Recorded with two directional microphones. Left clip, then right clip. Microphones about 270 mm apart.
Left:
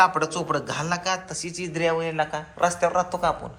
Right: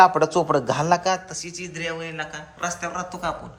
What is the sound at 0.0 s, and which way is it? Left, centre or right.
Speech, right.